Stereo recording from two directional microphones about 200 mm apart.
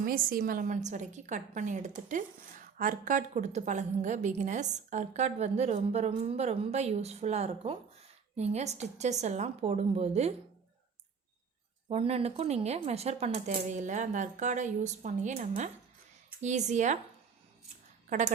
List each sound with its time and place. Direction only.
0.0 s a woman's voice: 45° right (ahead or behind)
11.9 s a woman's voice: 30° right (ahead or behind)